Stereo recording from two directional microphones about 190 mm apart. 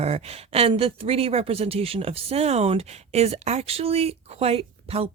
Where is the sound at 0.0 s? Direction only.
35° right (ahead or behind).